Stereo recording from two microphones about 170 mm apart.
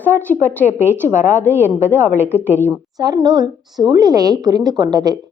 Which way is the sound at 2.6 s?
20° right (ahead or behind).